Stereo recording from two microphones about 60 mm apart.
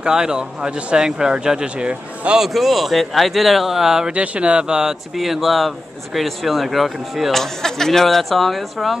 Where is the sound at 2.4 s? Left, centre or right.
Centre.